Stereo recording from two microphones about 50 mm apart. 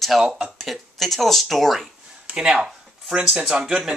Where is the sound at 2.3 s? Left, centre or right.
Centre.